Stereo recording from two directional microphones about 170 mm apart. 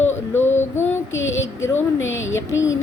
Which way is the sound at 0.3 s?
15° left (ahead or behind).